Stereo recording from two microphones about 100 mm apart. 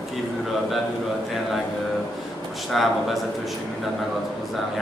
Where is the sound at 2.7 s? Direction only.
Centre (ahead or behind).